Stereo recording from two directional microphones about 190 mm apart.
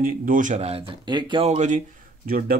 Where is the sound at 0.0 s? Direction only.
45° right (ahead or behind).